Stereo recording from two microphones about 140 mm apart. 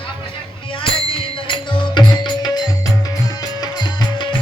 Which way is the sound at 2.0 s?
35° left (ahead or behind).